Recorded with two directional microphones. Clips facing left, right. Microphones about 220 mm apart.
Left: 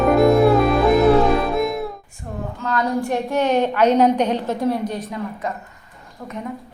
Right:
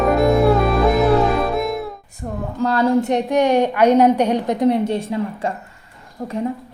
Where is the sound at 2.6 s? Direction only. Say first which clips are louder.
Right 6 dB; 30° right (ahead or behind).